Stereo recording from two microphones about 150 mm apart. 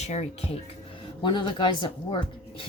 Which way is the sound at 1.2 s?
30° left (ahead or behind).